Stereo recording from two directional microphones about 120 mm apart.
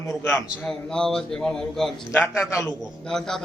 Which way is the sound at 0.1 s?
15° left (ahead or behind).